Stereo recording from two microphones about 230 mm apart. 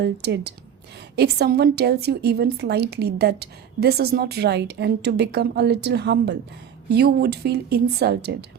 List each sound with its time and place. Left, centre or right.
0.0 s a woman's voice: right